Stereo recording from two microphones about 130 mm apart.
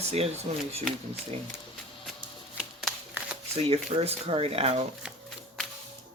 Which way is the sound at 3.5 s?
50° right (ahead or behind).